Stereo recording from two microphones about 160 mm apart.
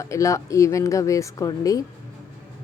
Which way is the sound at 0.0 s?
20° left (ahead or behind).